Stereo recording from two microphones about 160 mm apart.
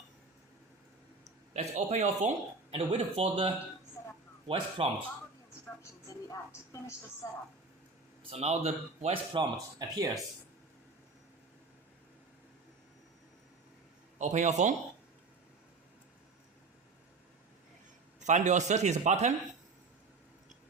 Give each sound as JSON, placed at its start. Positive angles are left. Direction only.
{"t": 1.5, "sound": "a man's voice", "side_deg": -45}
{"t": 6.1, "sound": "music", "side_deg": 20}
{"t": 8.3, "sound": "speech", "side_deg": -40}
{"t": 9.3, "sound": "speech", "side_deg": -25}
{"t": 14.2, "sound": "a man's voice", "side_deg": -50}
{"t": 18.3, "sound": "a man's voice", "side_deg": -50}